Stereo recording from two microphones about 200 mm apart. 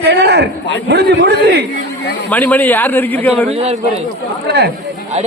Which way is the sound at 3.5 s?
30° right (ahead or behind).